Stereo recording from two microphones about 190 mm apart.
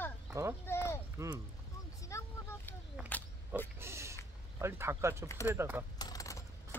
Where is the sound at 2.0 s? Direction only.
15° left (ahead or behind).